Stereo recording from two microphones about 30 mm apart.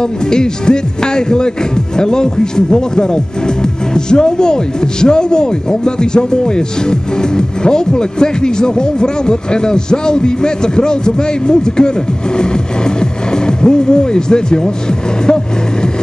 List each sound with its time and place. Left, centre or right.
0.0 s speech: left